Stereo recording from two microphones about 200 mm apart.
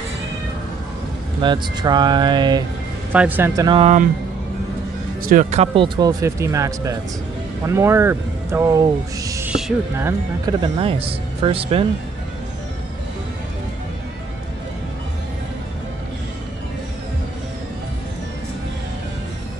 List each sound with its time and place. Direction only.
1.4 s speech: 20° right (ahead or behind)
3.1 s speech: 10° right (ahead or behind)
3.6 s speech: 25° right (ahead or behind)
5.2 s speech: 40° right (ahead or behind)
5.9 s speech: 15° right (ahead or behind)
9.5 s music: 5° right (ahead or behind)
9.9 s speech: 15° right (ahead or behind)